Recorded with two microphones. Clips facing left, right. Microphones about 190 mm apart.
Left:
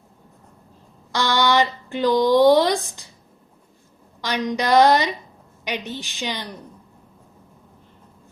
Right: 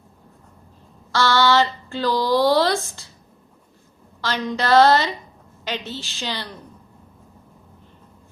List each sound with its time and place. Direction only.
1.1 s speech: 15° left (ahead or behind)
4.2 s speech: 15° left (ahead or behind)